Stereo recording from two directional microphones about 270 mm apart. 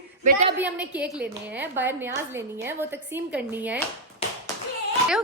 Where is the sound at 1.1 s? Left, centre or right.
Centre.